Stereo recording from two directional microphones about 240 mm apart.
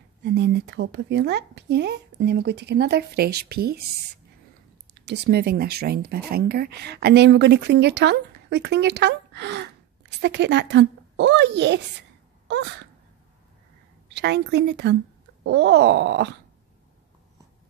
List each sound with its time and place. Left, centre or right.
0.2 s speech: right
4.9 s speech: right
12.4 s sneeze: right
14.0 s a woman's voice: right